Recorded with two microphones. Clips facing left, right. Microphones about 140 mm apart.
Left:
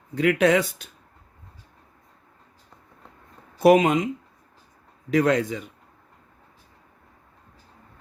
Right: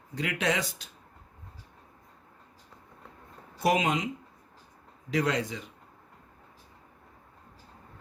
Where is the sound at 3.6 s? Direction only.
55° left (ahead or behind).